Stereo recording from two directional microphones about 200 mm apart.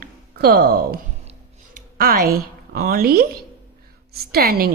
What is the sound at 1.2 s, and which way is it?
Music, 30° right (ahead or behind).